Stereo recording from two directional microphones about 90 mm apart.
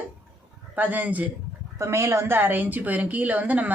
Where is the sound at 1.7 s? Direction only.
30° right (ahead or behind).